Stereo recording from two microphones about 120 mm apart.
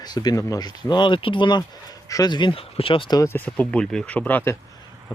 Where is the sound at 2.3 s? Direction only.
40° left (ahead or behind).